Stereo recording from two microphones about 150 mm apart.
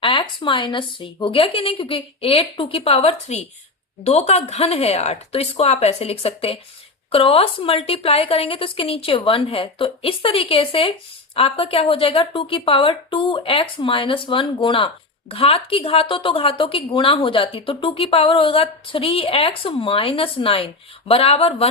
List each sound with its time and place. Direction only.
0.0 s a woman's voice: 35° left (ahead or behind)